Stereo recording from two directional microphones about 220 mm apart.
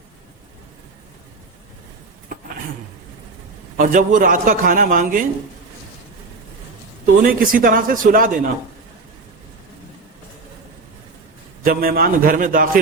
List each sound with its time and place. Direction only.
3.8 s a man's voice: 35° right (ahead or behind)
7.2 s a man's voice: 40° right (ahead or behind)
11.6 s a man's voice: 40° right (ahead or behind)